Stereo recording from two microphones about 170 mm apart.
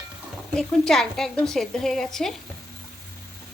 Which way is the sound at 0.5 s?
5° left (ahead or behind).